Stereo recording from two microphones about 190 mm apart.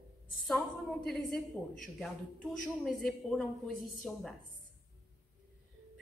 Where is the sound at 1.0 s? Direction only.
Centre (ahead or behind).